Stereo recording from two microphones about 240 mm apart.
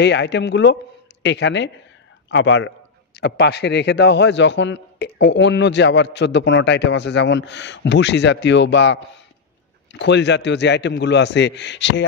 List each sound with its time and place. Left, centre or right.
0.0 s a man's voice: left